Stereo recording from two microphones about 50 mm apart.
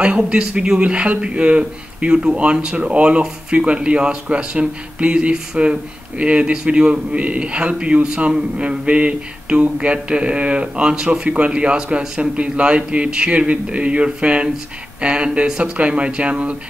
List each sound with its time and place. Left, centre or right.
0.0 s speech: centre